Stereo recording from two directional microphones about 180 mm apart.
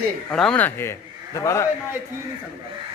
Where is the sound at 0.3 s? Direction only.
5° left (ahead or behind).